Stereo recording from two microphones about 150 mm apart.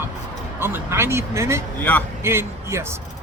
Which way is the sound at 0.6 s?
15° right (ahead or behind).